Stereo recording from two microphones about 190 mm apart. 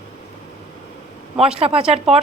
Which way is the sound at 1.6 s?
30° right (ahead or behind).